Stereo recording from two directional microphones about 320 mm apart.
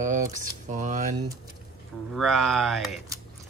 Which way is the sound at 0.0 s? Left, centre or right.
Right.